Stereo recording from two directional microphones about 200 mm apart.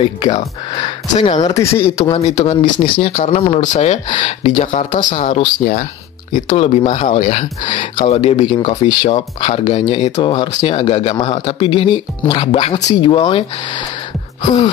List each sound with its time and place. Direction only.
0.0 s speech: 25° left (ahead or behind)
2.1 s speech: 35° left (ahead or behind)
4.6 s speech: 40° left (ahead or behind)